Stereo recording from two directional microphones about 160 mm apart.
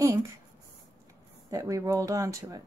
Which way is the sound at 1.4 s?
20° right (ahead or behind).